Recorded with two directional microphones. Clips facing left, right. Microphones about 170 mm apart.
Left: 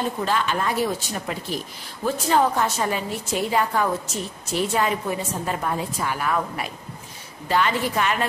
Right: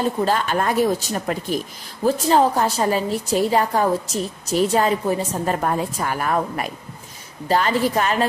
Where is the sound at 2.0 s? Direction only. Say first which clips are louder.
Right 4 dB; 35° right (ahead or behind).